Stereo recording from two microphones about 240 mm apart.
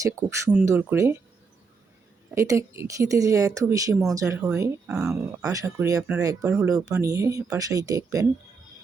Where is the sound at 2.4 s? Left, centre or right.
Centre.